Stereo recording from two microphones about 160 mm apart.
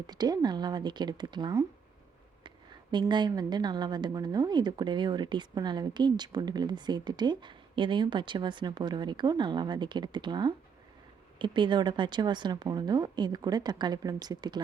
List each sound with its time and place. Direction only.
0.1 s a woman's voice: 25° right (ahead or behind)
2.9 s a woman's voice: 30° right (ahead or behind)